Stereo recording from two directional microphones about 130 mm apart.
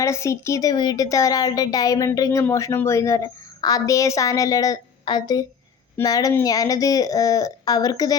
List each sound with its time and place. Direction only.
0.0 s a woman's voice: 20° left (ahead or behind)